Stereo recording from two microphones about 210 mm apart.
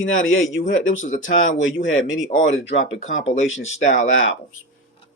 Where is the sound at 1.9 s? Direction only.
65° left (ahead or behind).